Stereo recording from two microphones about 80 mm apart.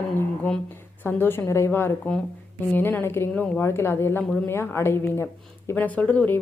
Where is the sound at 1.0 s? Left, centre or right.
Left.